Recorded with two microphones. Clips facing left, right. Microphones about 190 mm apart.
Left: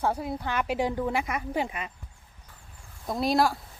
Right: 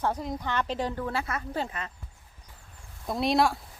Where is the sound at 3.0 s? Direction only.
Centre (ahead or behind).